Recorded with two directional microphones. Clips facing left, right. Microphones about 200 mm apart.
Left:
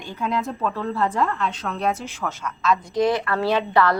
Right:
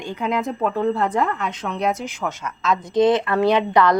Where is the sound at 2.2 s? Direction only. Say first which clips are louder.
Left 3 dB; 20° right (ahead or behind).